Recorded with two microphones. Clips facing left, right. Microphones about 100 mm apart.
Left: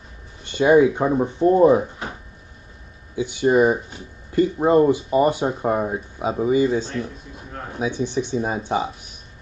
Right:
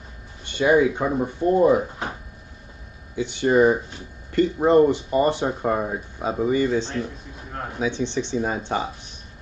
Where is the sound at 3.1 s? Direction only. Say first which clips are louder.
Left 1 dB; 15° left (ahead or behind).